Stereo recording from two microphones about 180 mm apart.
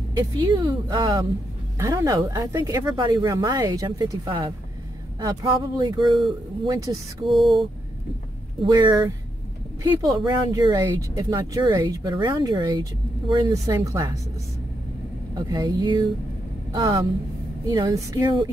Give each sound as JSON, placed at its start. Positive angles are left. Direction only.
{"t": 0.1, "sound": "speech", "side_deg": -20}
{"t": 7.2, "sound": "a sound", "side_deg": 0}
{"t": 8.6, "sound": "speech", "side_deg": -20}
{"t": 15.3, "sound": "speech", "side_deg": -20}